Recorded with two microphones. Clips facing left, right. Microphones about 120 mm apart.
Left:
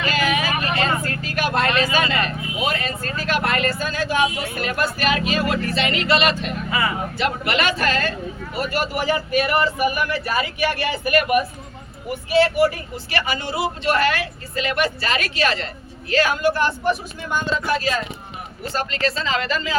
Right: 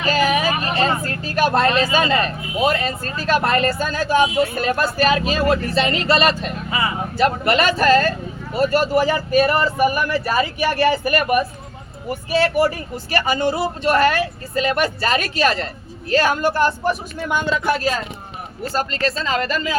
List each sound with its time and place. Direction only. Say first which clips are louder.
0.0 s speech: right 4 dB; 35° right (ahead or behind)
6.7 s speech: even; 25° right (ahead or behind)
7.2 s speech: right 6 dB; 40° right (ahead or behind)
13.1 s speech: right 5 dB; 45° right (ahead or behind)
18.6 s speech: right 2 dB; 45° right (ahead or behind)